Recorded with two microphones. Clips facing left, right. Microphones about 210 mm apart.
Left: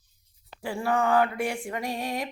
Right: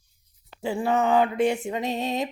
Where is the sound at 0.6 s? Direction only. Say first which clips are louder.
Right 3 dB; 20° right (ahead or behind).